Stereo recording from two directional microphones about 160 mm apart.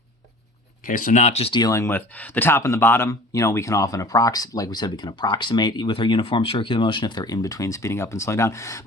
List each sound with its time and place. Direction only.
0.9 s speech: 55° left (ahead or behind); by 1.6 s 35° left (ahead or behind)
1.6 s speech: 15° left (ahead or behind)